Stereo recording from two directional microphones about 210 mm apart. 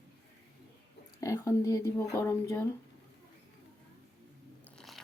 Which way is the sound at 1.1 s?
15° left (ahead or behind).